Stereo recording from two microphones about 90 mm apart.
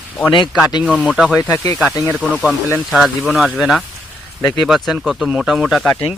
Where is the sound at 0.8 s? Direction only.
10° right (ahead or behind).